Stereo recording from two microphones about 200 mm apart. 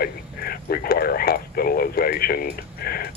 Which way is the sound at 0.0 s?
50° left (ahead or behind).